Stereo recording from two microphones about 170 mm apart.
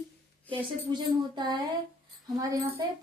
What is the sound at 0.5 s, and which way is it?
A woman's voice, 25° right (ahead or behind).